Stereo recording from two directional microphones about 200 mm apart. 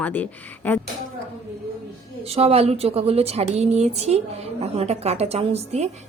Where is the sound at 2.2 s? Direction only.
30° right (ahead or behind).